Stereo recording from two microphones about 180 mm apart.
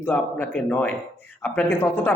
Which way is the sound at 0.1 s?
10° left (ahead or behind).